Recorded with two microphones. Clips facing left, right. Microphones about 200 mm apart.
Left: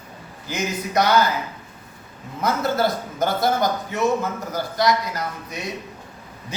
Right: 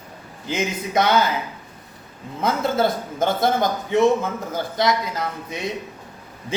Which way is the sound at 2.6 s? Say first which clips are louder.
Right 2 dB; 25° right (ahead or behind).